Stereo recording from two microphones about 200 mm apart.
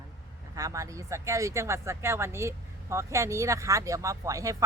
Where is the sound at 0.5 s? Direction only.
15° right (ahead or behind).